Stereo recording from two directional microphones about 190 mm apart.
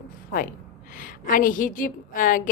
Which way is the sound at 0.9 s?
45° left (ahead or behind).